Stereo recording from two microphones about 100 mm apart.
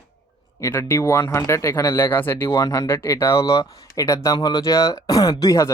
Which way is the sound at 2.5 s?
40° left (ahead or behind).